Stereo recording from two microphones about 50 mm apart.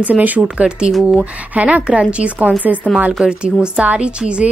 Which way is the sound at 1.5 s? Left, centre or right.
Right.